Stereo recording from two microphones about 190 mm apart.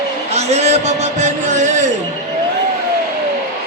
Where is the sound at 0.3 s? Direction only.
35° right (ahead or behind).